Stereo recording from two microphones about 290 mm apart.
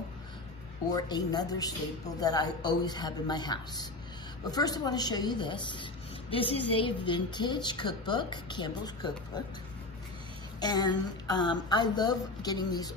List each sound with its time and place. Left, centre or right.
0.9 s a woman's voice: centre
10.6 s speech: centre